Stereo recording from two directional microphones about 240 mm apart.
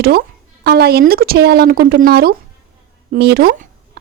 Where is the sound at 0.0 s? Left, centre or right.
Right.